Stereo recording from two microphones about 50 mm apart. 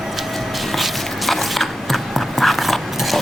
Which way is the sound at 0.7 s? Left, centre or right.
Centre.